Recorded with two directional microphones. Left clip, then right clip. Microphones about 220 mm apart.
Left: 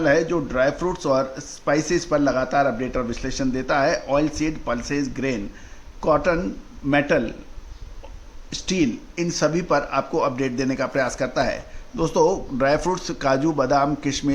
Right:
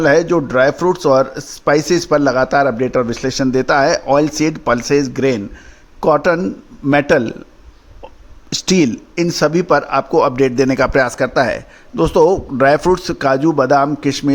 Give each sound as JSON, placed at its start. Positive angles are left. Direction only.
{"t": 0.0, "sound": "a man's voice", "side_deg": -45}
{"t": 8.4, "sound": "a man's voice", "side_deg": -45}